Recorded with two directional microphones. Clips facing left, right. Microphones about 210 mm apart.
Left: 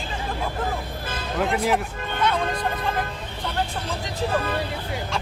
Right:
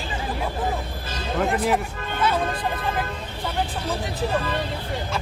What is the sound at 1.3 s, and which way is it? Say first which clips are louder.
Speech: right 1 dB; centre (ahead or behind).